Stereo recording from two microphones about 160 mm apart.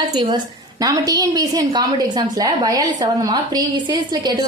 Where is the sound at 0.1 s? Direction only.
25° right (ahead or behind).